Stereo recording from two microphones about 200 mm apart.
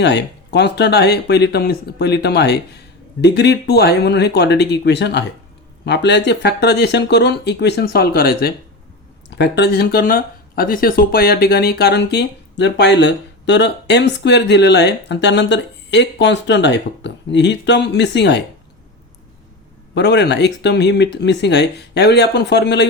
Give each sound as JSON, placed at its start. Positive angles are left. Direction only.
{"t": 0.0, "sound": "speech", "side_deg": 60}
{"t": 19.9, "sound": "speech", "side_deg": 55}